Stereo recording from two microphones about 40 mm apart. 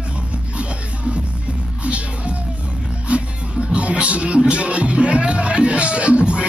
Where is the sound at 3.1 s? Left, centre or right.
Right.